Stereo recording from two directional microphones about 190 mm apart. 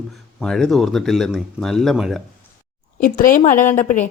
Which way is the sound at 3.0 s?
45° left (ahead or behind).